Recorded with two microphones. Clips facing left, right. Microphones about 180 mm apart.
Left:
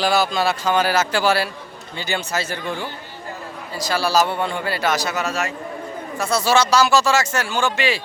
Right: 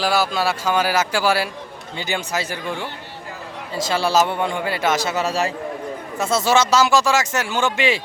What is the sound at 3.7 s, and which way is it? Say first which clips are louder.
Speech: right 1 dB; 25° right (ahead or behind).